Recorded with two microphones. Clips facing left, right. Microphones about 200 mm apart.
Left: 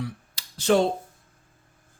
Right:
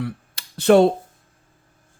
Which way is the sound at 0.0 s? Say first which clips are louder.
Right 5 dB; 60° right (ahead or behind).